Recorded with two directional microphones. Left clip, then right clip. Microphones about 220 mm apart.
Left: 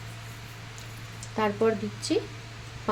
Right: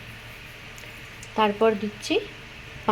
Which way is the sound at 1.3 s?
10° right (ahead or behind).